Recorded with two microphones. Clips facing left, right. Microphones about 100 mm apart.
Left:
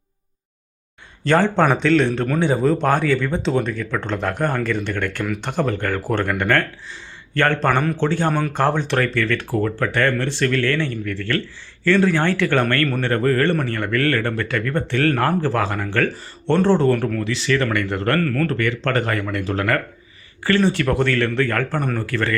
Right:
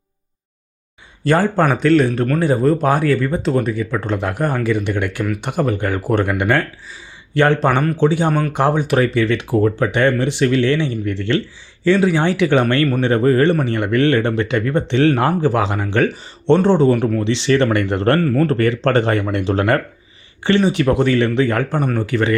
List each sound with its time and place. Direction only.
1.2 s speech: 5° right (ahead or behind)
17.2 s speech: 30° right (ahead or behind)
18.2 s speech: 15° right (ahead or behind)
18.4 s speech: 35° right (ahead or behind)